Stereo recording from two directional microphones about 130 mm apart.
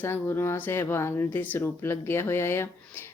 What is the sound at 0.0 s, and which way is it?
Speech, 20° left (ahead or behind).